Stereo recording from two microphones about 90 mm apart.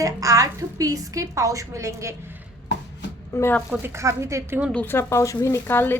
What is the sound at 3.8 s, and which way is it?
Speech, 30° right (ahead or behind).